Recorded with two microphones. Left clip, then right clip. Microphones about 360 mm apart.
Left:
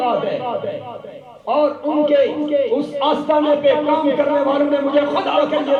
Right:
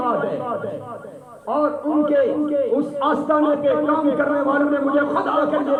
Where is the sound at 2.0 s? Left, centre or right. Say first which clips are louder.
Left 3 dB; centre.